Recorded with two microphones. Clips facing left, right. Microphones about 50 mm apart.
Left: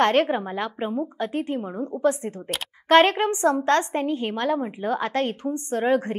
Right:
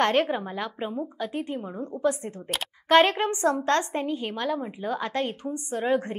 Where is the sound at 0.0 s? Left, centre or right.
Left.